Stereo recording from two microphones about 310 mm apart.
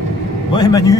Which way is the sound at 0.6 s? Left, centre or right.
Centre.